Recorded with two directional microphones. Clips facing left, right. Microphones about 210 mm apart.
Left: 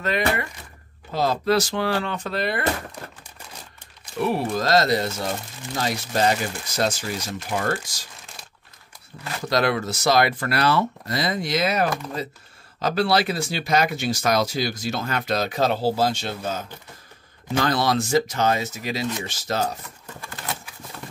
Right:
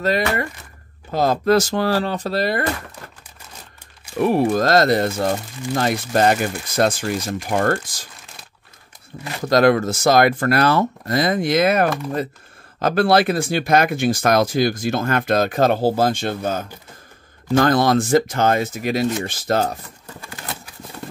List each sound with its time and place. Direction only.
1.1 s speech: 50° right (ahead or behind)
4.2 s speech: 50° right (ahead or behind)
9.1 s speech: 40° right (ahead or behind); by 19.7 s 55° right (ahead or behind)